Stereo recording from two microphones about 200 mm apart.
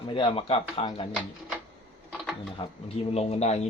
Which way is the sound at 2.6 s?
25° left (ahead or behind).